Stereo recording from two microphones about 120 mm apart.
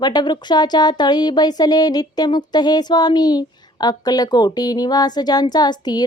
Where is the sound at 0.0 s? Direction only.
35° left (ahead or behind).